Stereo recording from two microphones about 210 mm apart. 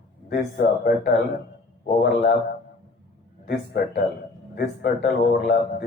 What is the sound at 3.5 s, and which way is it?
Speech, 50° left (ahead or behind).